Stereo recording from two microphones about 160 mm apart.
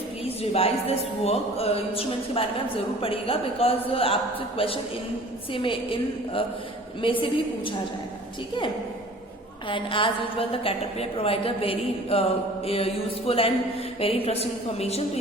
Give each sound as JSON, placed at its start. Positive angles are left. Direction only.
{"t": 0.3, "sound": "music", "side_deg": 40}
{"t": 9.6, "sound": "music", "side_deg": 30}